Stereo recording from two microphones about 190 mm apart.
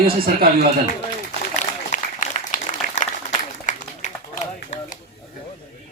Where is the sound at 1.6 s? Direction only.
40° left (ahead or behind).